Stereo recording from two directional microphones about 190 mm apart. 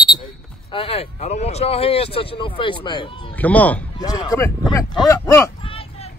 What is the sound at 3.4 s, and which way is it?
Speech, 10° left (ahead or behind).